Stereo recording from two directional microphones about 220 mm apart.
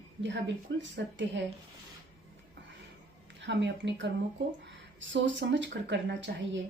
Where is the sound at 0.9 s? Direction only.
55° right (ahead or behind).